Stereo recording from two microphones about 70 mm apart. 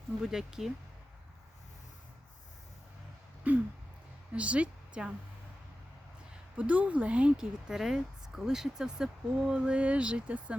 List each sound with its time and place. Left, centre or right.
0.2 s a woman's voice: centre
3.5 s a sound: right
4.4 s a woman's voice: centre
6.6 s a woman's voice: right